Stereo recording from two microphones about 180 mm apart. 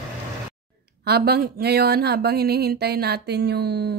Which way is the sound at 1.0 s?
60° right (ahead or behind).